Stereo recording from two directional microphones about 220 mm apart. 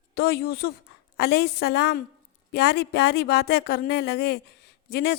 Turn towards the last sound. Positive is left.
turn(degrees=45)  # may be behind; listen again after turning